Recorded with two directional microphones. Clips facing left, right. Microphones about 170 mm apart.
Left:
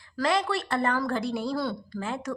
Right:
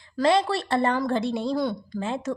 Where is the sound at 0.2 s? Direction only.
25° right (ahead or behind).